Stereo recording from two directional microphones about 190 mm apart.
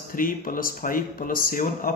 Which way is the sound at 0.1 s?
45° left (ahead or behind).